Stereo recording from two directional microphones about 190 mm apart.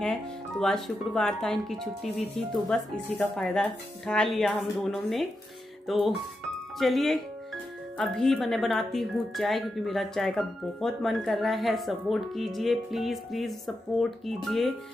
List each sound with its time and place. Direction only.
0.0 s speech: 5° left (ahead or behind)